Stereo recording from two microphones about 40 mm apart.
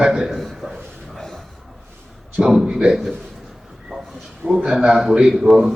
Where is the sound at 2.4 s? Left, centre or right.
Centre.